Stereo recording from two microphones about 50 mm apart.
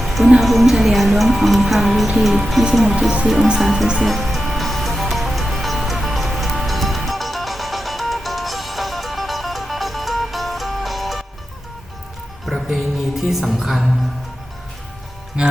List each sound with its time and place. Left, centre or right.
0.0 s music: centre
0.3 s speech: centre
4.0 s music: centre
12.7 s music: centre
15.4 s music: right